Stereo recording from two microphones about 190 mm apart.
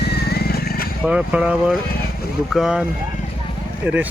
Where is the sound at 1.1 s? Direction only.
5° right (ahead or behind).